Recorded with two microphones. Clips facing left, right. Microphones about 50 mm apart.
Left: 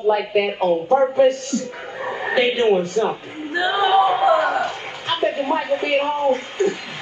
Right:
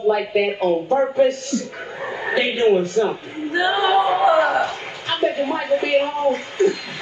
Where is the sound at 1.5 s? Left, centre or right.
Left.